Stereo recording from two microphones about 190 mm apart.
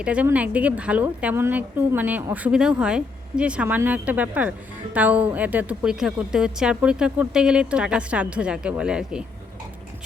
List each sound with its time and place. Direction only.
0.0 s a woman's voice: 5° right (ahead or behind)